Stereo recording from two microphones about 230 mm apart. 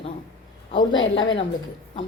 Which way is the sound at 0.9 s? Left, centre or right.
Left.